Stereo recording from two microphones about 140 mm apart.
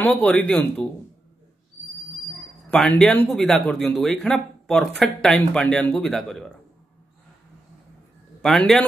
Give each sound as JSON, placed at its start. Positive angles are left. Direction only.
{"t": 0.0, "sound": "speech", "side_deg": 10}
{"t": 2.7, "sound": "speech", "side_deg": 5}
{"t": 8.4, "sound": "a man's voice", "side_deg": 5}